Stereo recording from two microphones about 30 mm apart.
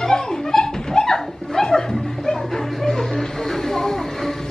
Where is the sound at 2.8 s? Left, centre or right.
Centre.